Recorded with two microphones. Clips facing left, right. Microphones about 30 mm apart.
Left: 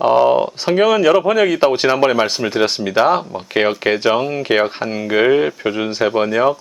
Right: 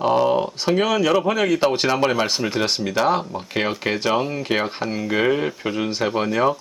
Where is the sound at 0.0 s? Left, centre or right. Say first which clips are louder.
Left 6 dB; centre.